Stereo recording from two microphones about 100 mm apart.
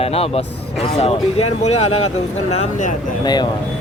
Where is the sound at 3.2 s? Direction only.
45° left (ahead or behind).